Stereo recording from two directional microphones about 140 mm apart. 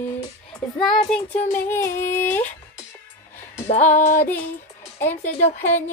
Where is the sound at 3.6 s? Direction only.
55° left (ahead or behind).